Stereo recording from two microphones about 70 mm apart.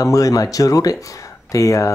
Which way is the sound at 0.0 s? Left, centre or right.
Left.